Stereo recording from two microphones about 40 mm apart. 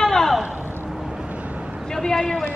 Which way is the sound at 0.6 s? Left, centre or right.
Right.